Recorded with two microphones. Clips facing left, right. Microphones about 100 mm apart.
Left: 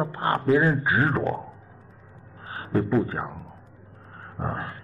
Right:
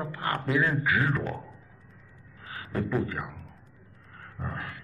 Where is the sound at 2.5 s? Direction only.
35° left (ahead or behind).